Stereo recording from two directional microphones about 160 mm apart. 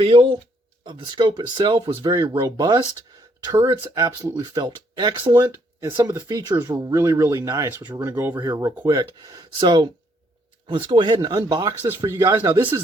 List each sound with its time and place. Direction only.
0.0 s speech: 35° right (ahead or behind); by 12.7 s 15° right (ahead or behind)